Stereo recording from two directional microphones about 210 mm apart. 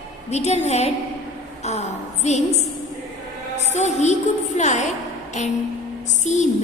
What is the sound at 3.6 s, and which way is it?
A woman's voice, 35° left (ahead or behind).